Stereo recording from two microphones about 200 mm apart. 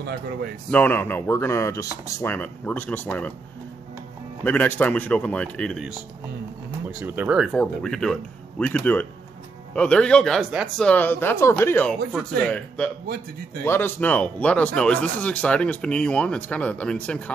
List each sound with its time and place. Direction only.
0.0 s a man's voice: 55° right (ahead or behind)
0.7 s speech: 10° left (ahead or behind)
4.5 s speech: 10° left (ahead or behind)
13.0 s a man's voice: 50° right (ahead or behind)
13.7 s speech: 10° left (ahead or behind)